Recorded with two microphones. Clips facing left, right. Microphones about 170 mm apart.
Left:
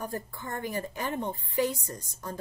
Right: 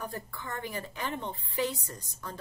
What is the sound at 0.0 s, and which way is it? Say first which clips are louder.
A woman's voice: left 3 dB; 45° left (ahead or behind).